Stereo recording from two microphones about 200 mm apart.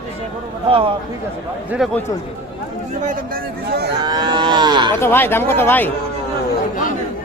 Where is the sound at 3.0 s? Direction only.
50° right (ahead or behind).